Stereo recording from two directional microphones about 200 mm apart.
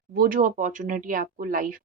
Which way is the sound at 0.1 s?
45° right (ahead or behind).